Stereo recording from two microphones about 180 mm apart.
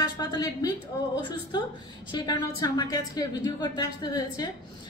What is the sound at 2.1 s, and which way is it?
Speech, 20° left (ahead or behind).